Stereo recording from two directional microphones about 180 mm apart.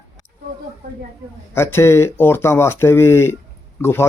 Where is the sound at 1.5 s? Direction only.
15° left (ahead or behind).